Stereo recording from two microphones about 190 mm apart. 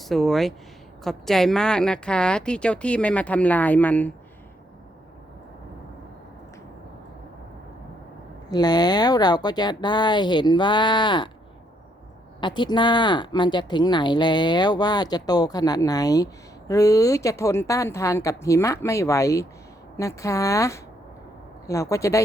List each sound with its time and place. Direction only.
0.0 s a woman's voice: centre (ahead or behind)
8.4 s speech: 20° left (ahead or behind)
12.4 s a woman's voice: 25° left (ahead or behind)